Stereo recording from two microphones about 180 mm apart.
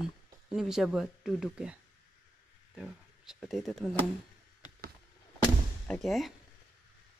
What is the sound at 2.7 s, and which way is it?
Speech, 5° right (ahead or behind).